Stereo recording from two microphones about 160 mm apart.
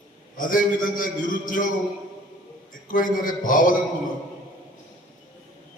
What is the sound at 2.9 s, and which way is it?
Speech, 60° left (ahead or behind).